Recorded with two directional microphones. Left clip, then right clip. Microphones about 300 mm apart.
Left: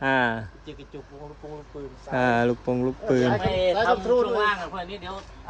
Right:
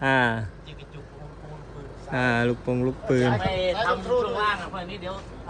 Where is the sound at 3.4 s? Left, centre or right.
Left.